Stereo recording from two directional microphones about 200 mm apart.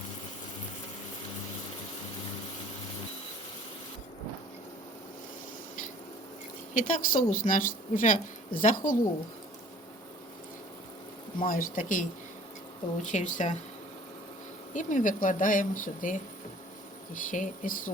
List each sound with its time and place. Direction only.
6.7 s a woman's voice: 40° left (ahead or behind)
11.3 s a woman's voice: 45° left (ahead or behind)
14.7 s speech: 40° left (ahead or behind)